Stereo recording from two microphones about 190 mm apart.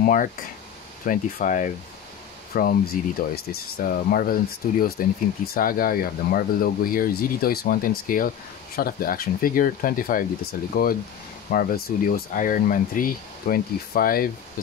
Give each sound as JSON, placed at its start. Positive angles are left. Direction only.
{"t": 0.0, "sound": "speech", "side_deg": 45}